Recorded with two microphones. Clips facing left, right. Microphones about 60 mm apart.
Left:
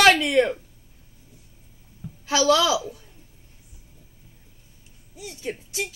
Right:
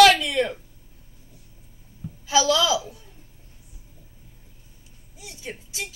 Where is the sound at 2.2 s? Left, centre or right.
Left.